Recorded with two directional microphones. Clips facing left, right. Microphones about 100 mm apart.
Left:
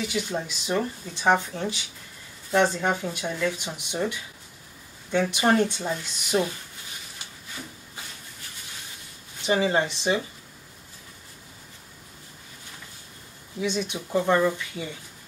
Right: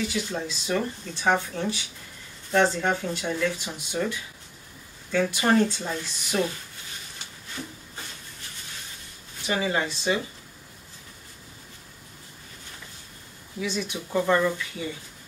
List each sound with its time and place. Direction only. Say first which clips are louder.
0.1 s speech: left 1 dB; 20° left (ahead or behind)
9.5 s speech: left 3 dB; 25° left (ahead or behind)
13.6 s speech: left 2 dB; 20° left (ahead or behind)